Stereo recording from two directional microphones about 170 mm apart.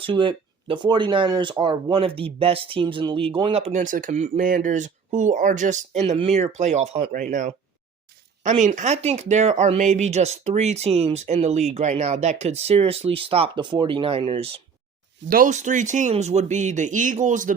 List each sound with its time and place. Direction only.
0.0 s speech: 30° right (ahead or behind)
7.1 s speech: 50° right (ahead or behind)
15.3 s speech: 50° right (ahead or behind)